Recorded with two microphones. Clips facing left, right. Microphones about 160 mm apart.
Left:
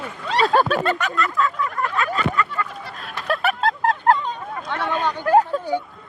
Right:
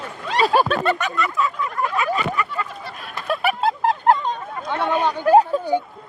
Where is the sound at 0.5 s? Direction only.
10° right (ahead or behind).